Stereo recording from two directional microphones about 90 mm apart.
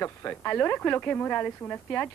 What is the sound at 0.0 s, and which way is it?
Speech, 20° left (ahead or behind).